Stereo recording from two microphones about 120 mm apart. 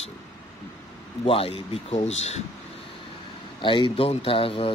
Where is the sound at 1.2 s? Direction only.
50° left (ahead or behind).